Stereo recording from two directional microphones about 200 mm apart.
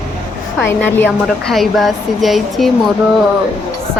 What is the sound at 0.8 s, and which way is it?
A woman's voice, 10° left (ahead or behind).